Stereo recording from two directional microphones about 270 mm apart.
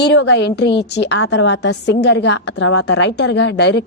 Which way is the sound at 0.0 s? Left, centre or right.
Left.